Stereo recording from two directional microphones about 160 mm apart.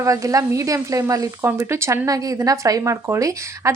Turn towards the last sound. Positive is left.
turn(degrees=-20)  # may be behind; listen again after turning